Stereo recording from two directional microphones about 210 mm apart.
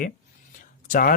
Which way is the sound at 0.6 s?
40° left (ahead or behind).